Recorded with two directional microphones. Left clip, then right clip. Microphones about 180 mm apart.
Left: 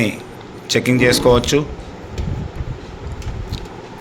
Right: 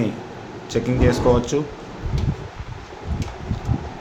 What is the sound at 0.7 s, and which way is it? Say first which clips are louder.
Speech: left 6 dB; 15° left (ahead or behind).